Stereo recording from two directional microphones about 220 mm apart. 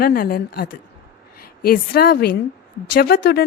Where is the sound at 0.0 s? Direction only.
40° left (ahead or behind).